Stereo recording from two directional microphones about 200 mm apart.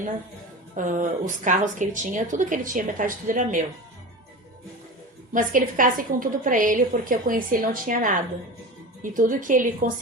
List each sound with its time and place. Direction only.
0.8 s speech: 40° right (ahead or behind)
5.3 s a woman's voice: 40° right (ahead or behind)
9.1 s speech: 40° right (ahead or behind)